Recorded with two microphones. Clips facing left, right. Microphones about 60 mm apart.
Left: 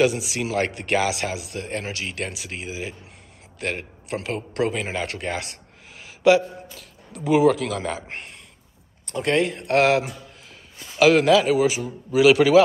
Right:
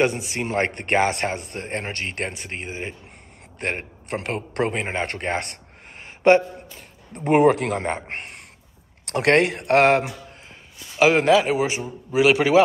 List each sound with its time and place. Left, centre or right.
0.0 s a man's voice: right
5.9 s a sound: right
7.2 s speech: right
9.0 s speech: right
11.0 s speech: right